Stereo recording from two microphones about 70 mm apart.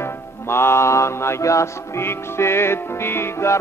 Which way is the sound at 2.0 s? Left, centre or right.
Left.